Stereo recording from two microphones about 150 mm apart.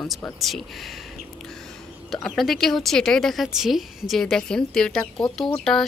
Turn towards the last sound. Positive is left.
turn(degrees=5)  # may be behind; listen again after turning